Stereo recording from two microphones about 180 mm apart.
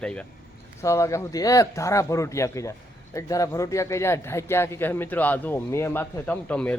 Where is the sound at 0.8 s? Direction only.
15° left (ahead or behind).